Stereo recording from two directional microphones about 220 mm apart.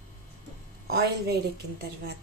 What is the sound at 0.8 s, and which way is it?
Speech, 45° right (ahead or behind).